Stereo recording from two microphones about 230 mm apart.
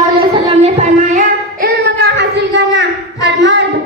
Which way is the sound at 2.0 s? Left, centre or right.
Right.